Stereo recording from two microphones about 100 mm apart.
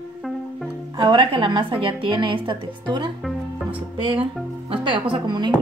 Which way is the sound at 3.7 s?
65° right (ahead or behind).